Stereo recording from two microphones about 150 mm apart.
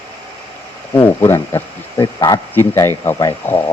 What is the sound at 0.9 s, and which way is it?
Speech, 15° left (ahead or behind).